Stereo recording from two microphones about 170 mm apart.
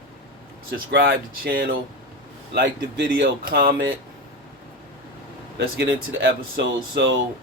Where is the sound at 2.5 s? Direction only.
80° right; by 3.7 s 60° right (ahead or behind).